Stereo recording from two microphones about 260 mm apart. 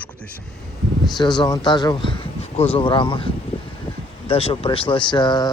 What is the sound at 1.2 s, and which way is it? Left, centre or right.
Speech, centre.